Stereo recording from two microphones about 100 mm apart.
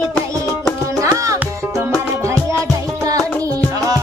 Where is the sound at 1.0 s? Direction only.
35° right (ahead or behind).